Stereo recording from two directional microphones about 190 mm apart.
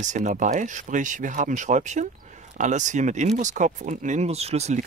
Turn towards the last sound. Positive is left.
turn(degrees=-35)  # may be behind; listen again after turning